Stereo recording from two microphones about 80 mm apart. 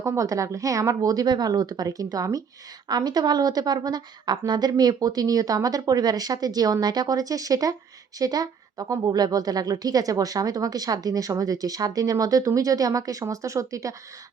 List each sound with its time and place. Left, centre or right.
0.0 s a woman's voice: right